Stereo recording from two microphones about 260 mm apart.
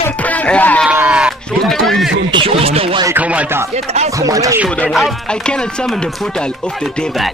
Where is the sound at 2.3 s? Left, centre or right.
Right.